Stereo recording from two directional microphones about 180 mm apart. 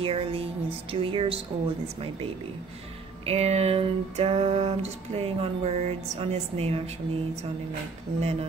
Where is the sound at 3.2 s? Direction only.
35° right (ahead or behind).